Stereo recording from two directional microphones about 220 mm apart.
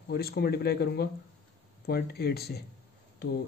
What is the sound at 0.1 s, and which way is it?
Speech, 45° left (ahead or behind).